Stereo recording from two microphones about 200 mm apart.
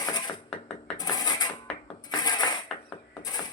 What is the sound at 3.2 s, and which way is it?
Mechanisms, 20° left (ahead or behind).